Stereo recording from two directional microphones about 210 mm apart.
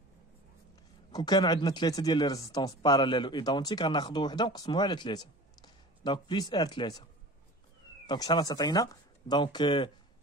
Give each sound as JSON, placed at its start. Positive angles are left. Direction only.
{"t": 1.1, "sound": "speech", "side_deg": 20}
{"t": 8.1, "sound": "speech", "side_deg": 20}